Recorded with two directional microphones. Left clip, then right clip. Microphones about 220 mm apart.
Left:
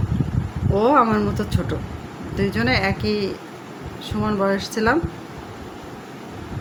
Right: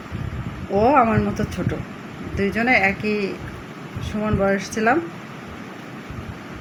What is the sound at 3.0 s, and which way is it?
Speech, 45° left (ahead or behind).